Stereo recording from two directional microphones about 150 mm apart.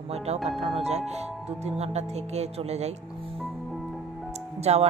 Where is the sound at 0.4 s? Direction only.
Centre (ahead or behind).